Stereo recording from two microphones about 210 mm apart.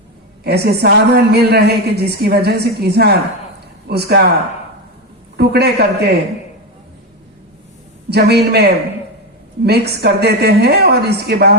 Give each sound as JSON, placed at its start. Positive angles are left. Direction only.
{"t": 0.4, "sound": "a woman's voice", "side_deg": -50}
{"t": 5.4, "sound": "a woman's voice", "side_deg": -50}
{"t": 8.1, "sound": "a woman's voice", "side_deg": -50}